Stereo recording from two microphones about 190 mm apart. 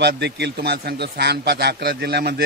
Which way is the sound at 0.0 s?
65° right (ahead or behind).